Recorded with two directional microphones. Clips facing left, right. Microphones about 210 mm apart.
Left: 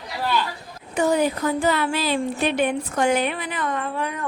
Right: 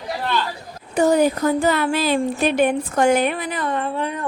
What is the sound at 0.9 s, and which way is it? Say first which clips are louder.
A woman's voice: right 4 dB; 40° right (ahead or behind).